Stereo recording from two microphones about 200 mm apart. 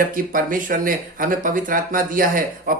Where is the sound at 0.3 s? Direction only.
45° right (ahead or behind).